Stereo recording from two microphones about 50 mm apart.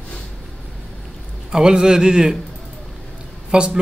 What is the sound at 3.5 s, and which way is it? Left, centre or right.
Speech, centre.